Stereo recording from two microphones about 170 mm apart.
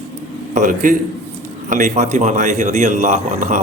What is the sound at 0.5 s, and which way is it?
Speech, 50° right (ahead or behind).